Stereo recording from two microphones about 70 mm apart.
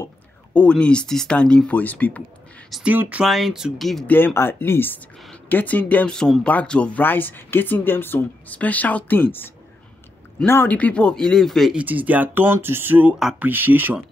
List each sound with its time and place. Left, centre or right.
0.6 s speech: centre
1.8 s speech: left
2.8 s speech: right
3.3 s speech: centre
4.1 s speech: left; by 7.0 s centre
7.0 s speech: left
10.7 s speech: centre
11.8 s speech: right